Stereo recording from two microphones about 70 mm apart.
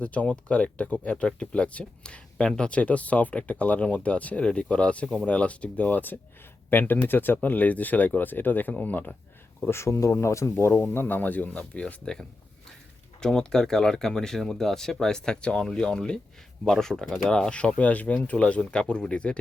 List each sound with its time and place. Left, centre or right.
0.0 s speech: left
9.6 s speech: left; by 19.4 s centre